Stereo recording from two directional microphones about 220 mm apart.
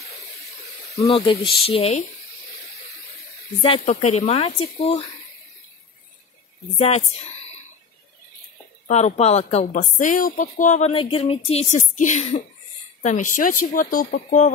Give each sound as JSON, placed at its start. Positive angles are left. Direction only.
{"t": 1.0, "sound": "speech", "side_deg": 25}
{"t": 3.6, "sound": "speech", "side_deg": 30}
{"t": 6.8, "sound": "speech", "side_deg": 30}
{"t": 8.8, "sound": "a woman's voice", "side_deg": 30}